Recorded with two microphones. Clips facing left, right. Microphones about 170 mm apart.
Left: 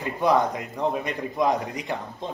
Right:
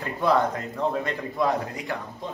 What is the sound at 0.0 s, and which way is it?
A man's voice, 15° left (ahead or behind).